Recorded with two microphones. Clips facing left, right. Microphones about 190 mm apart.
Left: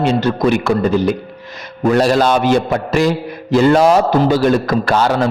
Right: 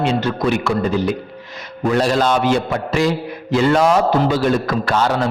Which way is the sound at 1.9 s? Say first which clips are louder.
Left 3 dB; 40° left (ahead or behind).